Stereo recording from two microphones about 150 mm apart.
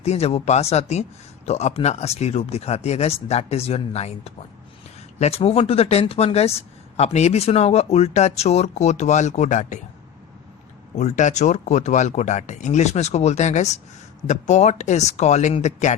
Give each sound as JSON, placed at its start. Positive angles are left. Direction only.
{"t": 0.0, "sound": "speech", "side_deg": 45}
{"t": 10.9, "sound": "speech", "side_deg": 55}